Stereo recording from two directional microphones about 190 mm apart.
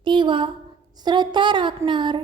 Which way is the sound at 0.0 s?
25° right (ahead or behind).